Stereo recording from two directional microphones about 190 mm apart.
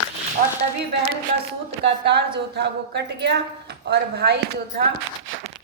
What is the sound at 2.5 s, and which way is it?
Speech, 65° right (ahead or behind).